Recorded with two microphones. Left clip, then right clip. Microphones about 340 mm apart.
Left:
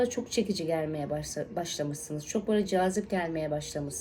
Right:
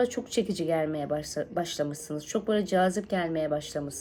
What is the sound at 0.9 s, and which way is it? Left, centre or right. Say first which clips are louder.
Speech: right 3 dB; right.